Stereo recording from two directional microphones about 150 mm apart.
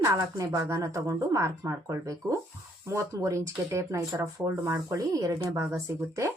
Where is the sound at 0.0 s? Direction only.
20° right (ahead or behind).